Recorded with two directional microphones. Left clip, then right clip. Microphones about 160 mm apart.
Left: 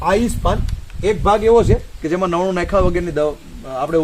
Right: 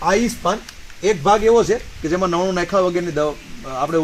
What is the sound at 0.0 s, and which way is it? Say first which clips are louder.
Speech: left 1 dB; 15° left (ahead or behind).